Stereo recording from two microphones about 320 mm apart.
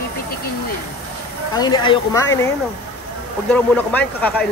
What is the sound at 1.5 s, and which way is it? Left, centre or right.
Speech, centre.